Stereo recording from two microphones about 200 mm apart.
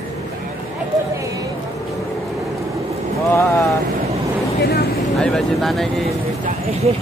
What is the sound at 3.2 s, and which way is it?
Speech, 15° left (ahead or behind).